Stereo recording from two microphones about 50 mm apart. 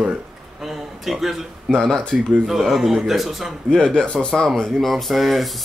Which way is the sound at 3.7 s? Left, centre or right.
Centre.